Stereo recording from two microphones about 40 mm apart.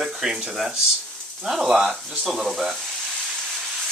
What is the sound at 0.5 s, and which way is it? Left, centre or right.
Speech, centre.